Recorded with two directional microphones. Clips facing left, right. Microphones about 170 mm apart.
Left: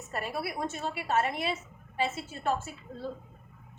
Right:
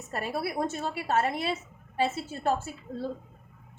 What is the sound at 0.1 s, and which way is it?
A woman's voice, 40° right (ahead or behind).